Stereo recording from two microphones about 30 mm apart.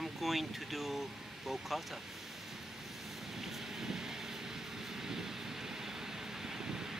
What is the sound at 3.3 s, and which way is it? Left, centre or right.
Vehicle, centre.